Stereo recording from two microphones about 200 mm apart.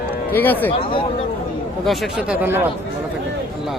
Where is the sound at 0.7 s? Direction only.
25° left (ahead or behind).